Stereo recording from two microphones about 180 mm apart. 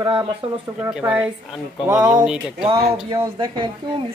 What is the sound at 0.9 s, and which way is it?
Speech, 10° right (ahead or behind).